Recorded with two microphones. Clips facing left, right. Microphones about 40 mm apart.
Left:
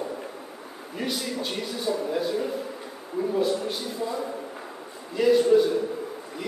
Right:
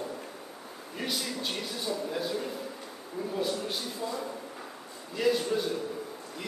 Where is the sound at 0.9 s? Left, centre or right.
Centre.